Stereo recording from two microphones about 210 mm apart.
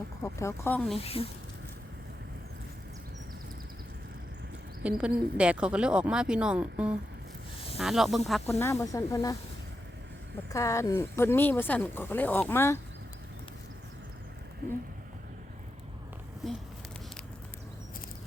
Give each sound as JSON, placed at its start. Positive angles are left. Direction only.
{"t": 0.2, "sound": "speech", "side_deg": 10}
{"t": 0.9, "sound": "speech", "side_deg": 30}
{"t": 4.8, "sound": "speech", "side_deg": -5}
{"t": 8.4, "sound": "speech", "side_deg": 10}
{"t": 10.5, "sound": "speech", "side_deg": 15}